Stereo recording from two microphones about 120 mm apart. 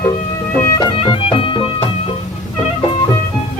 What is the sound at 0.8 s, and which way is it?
Music, 40° left (ahead or behind).